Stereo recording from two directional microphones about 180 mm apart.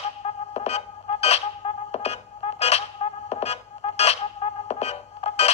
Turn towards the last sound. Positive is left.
turn(degrees=35)  # may be behind; listen again after turning